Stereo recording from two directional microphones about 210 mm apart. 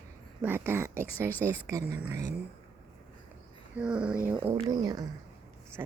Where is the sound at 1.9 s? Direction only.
10° right (ahead or behind).